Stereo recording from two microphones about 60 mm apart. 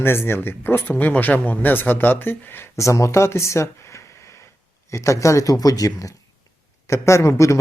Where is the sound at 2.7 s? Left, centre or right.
Left.